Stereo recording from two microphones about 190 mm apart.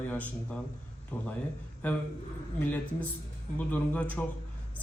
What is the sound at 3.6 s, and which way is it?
Speech, 5° left (ahead or behind).